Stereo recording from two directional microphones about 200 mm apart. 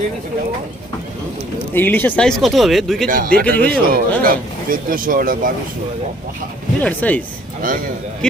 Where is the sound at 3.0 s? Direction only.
45° right (ahead or behind).